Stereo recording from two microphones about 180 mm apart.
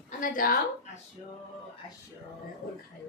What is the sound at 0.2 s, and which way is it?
Speech, 50° left (ahead or behind).